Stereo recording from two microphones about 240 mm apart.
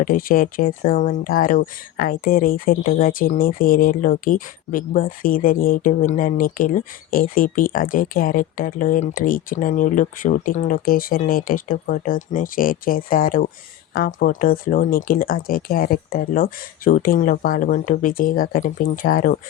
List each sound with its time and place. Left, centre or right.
0.0 s speech: left